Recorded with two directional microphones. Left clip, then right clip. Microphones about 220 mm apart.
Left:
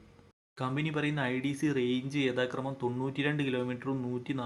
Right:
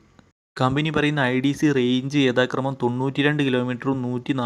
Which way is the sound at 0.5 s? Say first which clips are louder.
Right 12 dB; 45° right (ahead or behind).